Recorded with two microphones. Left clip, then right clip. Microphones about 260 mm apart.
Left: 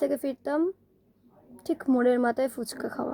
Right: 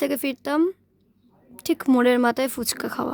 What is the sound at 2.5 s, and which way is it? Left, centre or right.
Speech, right.